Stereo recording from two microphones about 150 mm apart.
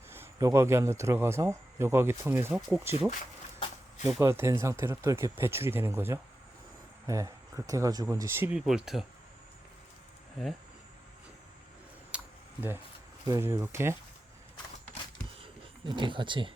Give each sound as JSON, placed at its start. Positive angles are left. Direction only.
{"t": 0.1, "sound": "speech", "side_deg": -20}
{"t": 10.4, "sound": "speech", "side_deg": 0}
{"t": 12.1, "sound": "camera", "side_deg": -10}
{"t": 13.2, "sound": "speech", "side_deg": -20}
{"t": 15.4, "sound": "a sound", "side_deg": -35}